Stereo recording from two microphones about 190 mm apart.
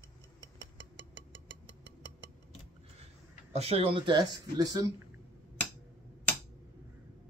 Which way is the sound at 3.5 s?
30° right (ahead or behind).